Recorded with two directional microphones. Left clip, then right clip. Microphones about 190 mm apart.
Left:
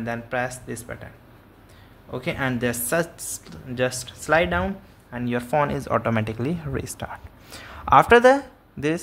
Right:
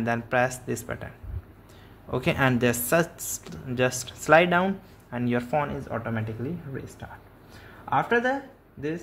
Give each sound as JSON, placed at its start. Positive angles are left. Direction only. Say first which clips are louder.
{"t": 0.0, "sound": "speech", "louder": "right 2 dB", "side_deg": -15}
{"t": 5.5, "sound": "speech", "louder": "left 8 dB", "side_deg": 15}
{"t": 5.8, "sound": "speech", "louder": "left 9 dB", "side_deg": 30}